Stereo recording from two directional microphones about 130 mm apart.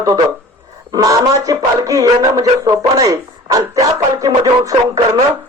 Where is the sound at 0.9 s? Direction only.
25° right (ahead or behind).